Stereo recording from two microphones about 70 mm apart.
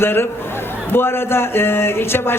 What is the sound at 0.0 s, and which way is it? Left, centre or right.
A man's voice, left.